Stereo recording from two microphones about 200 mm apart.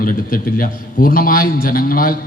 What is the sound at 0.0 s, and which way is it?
A man's voice, 45° left (ahead or behind).